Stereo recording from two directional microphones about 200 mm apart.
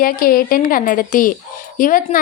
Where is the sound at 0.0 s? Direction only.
45° left (ahead or behind).